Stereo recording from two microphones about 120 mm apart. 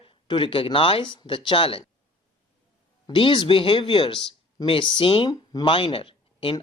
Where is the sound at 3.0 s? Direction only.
45° left (ahead or behind).